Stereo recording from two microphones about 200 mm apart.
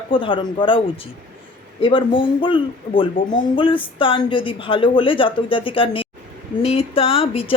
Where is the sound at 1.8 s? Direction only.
25° left (ahead or behind).